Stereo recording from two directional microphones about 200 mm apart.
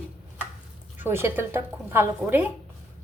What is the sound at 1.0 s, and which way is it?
A woman's voice, 10° right (ahead or behind).